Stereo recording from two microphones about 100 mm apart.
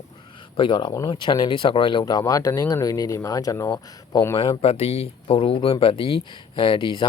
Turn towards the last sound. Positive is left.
turn(degrees=50)  # may be behind; listen again after turning